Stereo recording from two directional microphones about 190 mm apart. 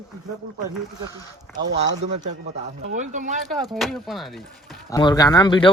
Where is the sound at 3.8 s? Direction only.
Centre (ahead or behind).